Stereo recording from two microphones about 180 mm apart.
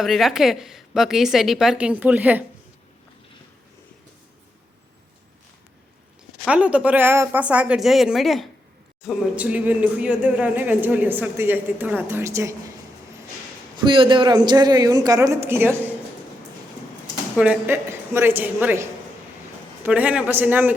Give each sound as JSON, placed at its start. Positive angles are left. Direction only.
{"t": 0.0, "sound": "a woman's voice", "side_deg": 0}
{"t": 6.4, "sound": "speech", "side_deg": -5}
{"t": 13.7, "sound": "a woman's voice", "side_deg": -25}
{"t": 17.3, "sound": "speech", "side_deg": -5}